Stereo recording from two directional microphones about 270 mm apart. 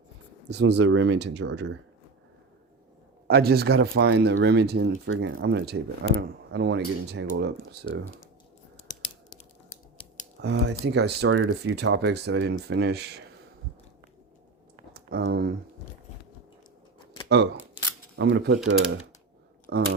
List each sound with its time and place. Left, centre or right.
0.4 s speech: right
3.2 s speech: right
10.4 s speech: right
14.9 s speech: right
17.2 s speech: right
19.7 s speech: right